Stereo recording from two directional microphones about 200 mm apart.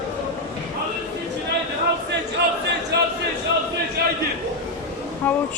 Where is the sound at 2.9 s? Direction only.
55° right (ahead or behind).